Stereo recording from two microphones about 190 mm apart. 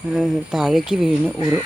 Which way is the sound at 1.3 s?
15° right (ahead or behind).